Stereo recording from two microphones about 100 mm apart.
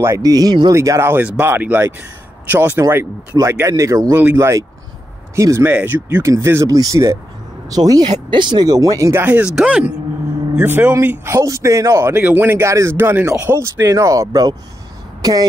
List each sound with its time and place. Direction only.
0.2 s speech: 40° right (ahead or behind)
0.7 s speech: 30° right (ahead or behind)
4.2 s speech: 20° right (ahead or behind)
5.7 s speech: 15° right (ahead or behind)
9.2 s speech: 15° right (ahead or behind)
12.1 s speech: 15° right (ahead or behind); by 15.4 s 40° right (ahead or behind)